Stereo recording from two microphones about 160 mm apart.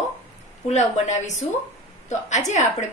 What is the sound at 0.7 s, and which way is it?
A woman's voice, 45° left (ahead or behind).